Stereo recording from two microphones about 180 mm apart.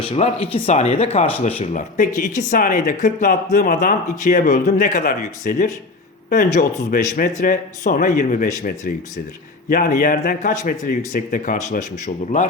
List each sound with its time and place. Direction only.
0.0 s speech: 30° left (ahead or behind)
6.9 s speech: 50° left (ahead or behind)